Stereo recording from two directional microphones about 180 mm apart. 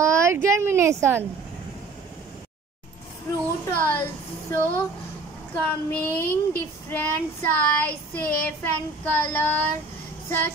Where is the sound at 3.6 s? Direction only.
15° left (ahead or behind).